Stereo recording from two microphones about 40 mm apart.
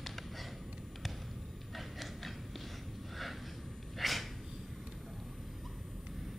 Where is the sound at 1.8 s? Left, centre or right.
Centre.